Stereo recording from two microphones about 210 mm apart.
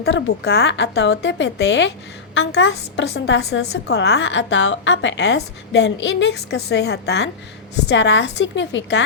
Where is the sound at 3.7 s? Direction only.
50° left (ahead or behind).